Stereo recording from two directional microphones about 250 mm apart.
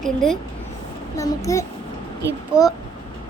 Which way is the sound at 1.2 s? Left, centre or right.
Centre.